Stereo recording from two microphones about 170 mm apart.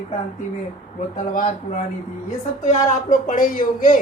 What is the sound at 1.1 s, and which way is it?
A woman's voice, 50° left (ahead or behind).